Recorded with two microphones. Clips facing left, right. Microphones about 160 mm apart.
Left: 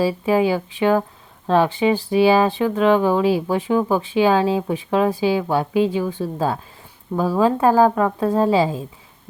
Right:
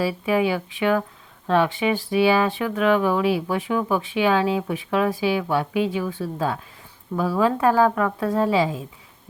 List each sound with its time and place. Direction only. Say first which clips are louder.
0.0 s speech: left 4 dB; 30° left (ahead or behind)